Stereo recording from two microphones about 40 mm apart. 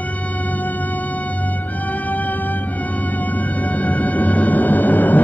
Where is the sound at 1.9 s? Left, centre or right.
Left.